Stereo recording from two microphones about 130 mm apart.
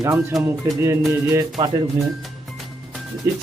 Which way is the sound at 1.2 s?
25° right (ahead or behind).